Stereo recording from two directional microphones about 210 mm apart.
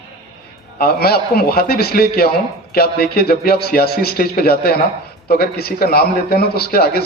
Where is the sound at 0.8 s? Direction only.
45° left (ahead or behind).